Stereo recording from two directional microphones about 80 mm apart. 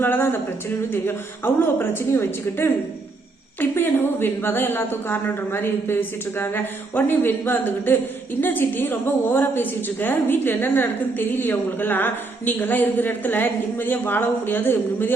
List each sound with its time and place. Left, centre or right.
0.0 s a woman's voice: left